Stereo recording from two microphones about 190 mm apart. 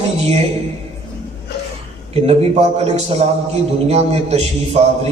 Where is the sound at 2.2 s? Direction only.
30° right (ahead or behind).